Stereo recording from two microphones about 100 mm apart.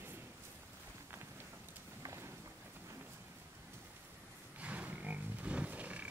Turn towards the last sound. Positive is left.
turn(degrees=-15)  # may be behind; listen again after turning